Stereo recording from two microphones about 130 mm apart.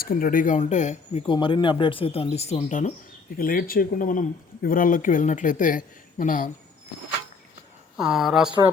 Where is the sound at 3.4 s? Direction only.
90° left.